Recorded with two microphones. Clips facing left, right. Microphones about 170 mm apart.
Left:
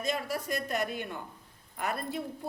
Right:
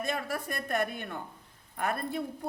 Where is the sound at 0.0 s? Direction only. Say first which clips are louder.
Left 1 dB; 55° right (ahead or behind).